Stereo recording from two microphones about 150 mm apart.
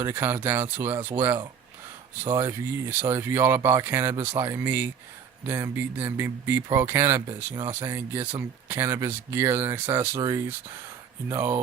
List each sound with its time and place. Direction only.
0.0 s speech: 15° right (ahead or behind)
2.4 s speech: 15° right (ahead or behind)
7.8 s speech: 15° right (ahead or behind)